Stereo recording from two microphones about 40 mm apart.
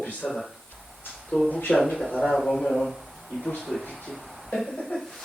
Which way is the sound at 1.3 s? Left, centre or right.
Centre.